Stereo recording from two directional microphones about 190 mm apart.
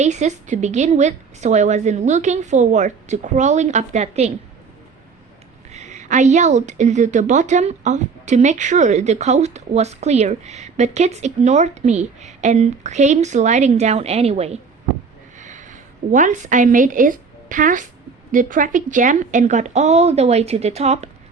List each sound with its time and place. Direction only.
0.0 s a woman's voice: 35° right (ahead or behind)
5.7 s a woman's voice: 40° right (ahead or behind)